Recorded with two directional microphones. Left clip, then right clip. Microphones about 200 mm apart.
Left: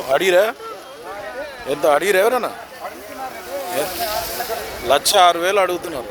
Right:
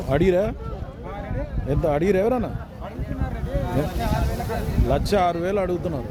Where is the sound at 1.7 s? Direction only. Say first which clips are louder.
Left 6 dB; 5° left (ahead or behind).